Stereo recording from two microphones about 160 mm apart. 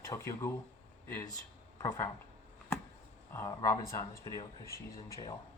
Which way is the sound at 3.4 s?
15° left (ahead or behind).